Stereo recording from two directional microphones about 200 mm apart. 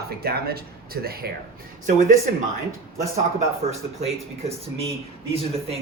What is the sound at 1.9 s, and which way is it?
Speech, 40° right (ahead or behind).